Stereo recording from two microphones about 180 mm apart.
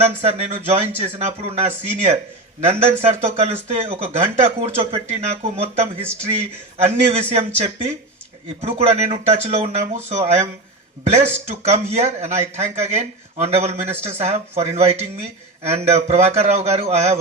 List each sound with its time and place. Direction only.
0.2 s speech: 35° right (ahead or behind)